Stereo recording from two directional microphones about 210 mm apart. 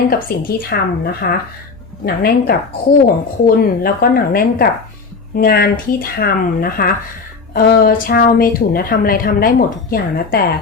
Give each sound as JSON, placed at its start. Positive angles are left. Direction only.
{"t": 0.1, "sound": "a woman's voice", "side_deg": 45}